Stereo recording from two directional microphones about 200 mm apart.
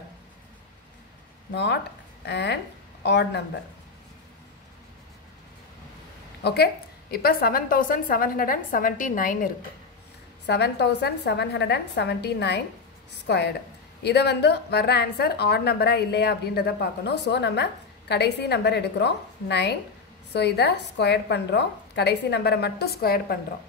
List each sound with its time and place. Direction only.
1.5 s a woman's voice: 60° left (ahead or behind)
6.4 s a woman's voice: 55° left (ahead or behind)
10.4 s a woman's voice: 55° left (ahead or behind)